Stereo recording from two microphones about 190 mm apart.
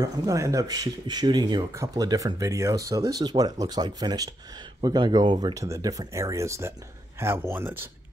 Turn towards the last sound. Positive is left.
turn(degrees=-10)  # may be behind; listen again after turning